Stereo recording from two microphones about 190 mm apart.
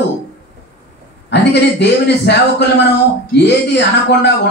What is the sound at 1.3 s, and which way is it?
A man's voice, 65° left (ahead or behind).